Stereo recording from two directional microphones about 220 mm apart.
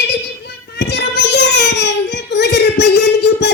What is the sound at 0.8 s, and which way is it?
Child singing, 50° left (ahead or behind).